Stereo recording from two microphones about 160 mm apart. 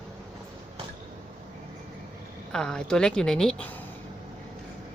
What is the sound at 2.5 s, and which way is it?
Speech, 5° left (ahead or behind).